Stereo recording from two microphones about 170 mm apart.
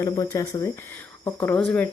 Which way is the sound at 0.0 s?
20° left (ahead or behind).